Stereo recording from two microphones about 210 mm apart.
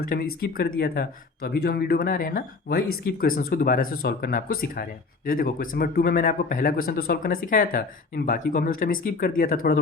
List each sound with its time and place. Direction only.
0.0 s speech: 45° left (ahead or behind)